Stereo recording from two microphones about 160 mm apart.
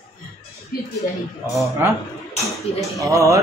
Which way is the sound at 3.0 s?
20° right (ahead or behind).